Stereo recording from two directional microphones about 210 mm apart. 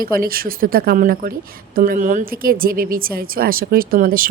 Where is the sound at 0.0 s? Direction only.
45° right (ahead or behind).